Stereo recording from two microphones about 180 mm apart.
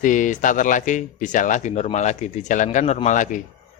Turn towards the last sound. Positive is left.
turn(degrees=45)  # may be behind; listen again after turning